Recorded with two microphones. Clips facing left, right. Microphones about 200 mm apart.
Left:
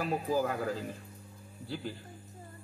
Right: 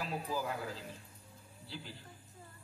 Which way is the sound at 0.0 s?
50° left (ahead or behind).